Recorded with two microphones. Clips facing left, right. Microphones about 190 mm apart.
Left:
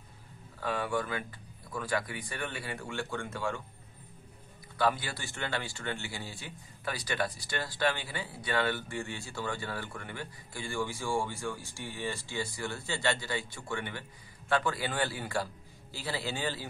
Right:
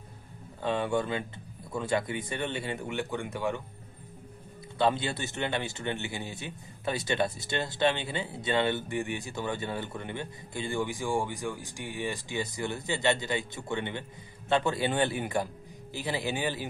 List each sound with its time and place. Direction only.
0.6 s a man's voice: 25° right (ahead or behind)
4.7 s a man's voice: 25° right (ahead or behind)